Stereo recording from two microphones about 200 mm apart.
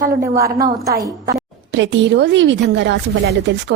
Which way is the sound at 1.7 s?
65° right (ahead or behind).